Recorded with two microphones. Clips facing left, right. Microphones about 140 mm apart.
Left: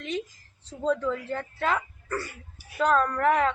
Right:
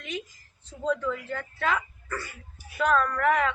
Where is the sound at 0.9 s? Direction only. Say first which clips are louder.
Left 2 dB; 35° left (ahead or behind).